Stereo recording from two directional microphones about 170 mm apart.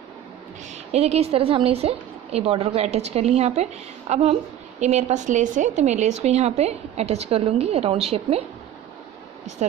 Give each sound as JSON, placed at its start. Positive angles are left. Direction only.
{"t": 0.9, "sound": "a woman's voice", "side_deg": -40}